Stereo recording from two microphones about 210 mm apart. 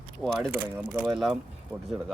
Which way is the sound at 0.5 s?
10° right (ahead or behind).